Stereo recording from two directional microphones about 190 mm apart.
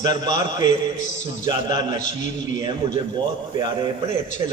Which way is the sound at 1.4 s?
20° right (ahead or behind).